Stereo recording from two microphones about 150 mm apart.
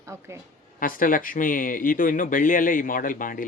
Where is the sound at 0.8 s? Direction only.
65° left (ahead or behind).